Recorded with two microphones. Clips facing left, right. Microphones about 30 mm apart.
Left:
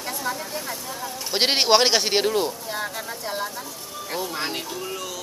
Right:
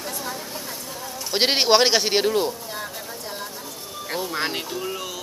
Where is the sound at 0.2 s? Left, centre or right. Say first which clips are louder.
Left 3 dB; centre.